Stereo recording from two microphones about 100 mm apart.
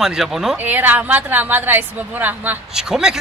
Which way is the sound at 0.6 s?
15° right (ahead or behind).